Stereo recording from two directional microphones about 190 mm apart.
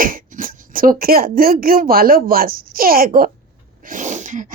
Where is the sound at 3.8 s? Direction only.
40° right (ahead or behind).